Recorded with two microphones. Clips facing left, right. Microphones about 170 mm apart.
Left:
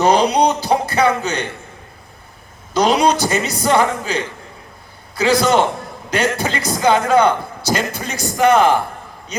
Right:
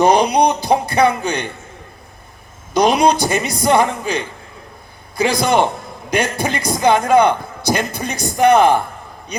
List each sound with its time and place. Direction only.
0.0 s speech: 15° right (ahead or behind)
2.7 s a man's voice: 15° right (ahead or behind)